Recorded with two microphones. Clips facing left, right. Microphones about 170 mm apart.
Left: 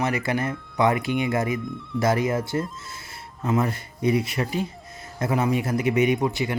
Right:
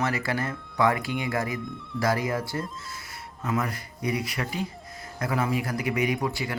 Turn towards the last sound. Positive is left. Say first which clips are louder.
# left 5 dB
turn(degrees=20)  # may be behind; listen again after turning